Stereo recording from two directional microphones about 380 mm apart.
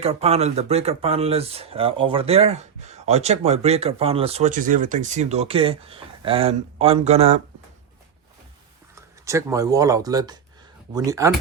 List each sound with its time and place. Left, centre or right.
0.0 s speech: centre
9.0 s speech: centre